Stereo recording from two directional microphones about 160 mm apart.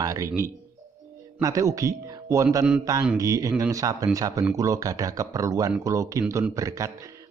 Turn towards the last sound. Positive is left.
turn(degrees=-20)  # may be behind; listen again after turning